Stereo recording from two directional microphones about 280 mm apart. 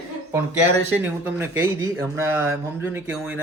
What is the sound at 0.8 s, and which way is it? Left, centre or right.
Speech, centre.